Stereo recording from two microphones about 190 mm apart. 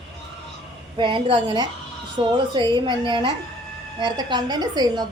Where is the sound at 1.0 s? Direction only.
25° right (ahead or behind).